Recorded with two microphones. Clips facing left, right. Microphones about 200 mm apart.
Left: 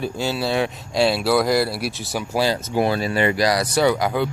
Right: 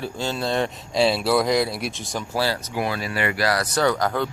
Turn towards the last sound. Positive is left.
turn(degrees=10)  # may be behind; listen again after turning